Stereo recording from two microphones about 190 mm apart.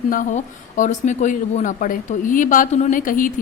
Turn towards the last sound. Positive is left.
turn(degrees=45)  # may be behind; listen again after turning